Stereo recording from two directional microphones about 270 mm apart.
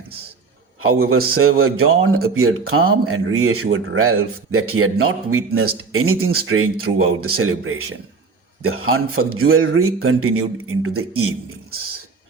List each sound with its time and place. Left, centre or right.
0.8 s speech: right